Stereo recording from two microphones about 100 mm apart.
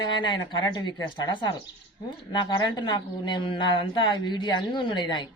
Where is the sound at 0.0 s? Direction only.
50° left (ahead or behind).